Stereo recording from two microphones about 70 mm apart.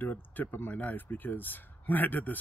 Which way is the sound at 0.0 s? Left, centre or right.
Left.